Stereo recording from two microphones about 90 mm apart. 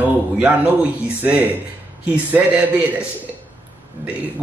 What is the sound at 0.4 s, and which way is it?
A man's voice, 15° right (ahead or behind).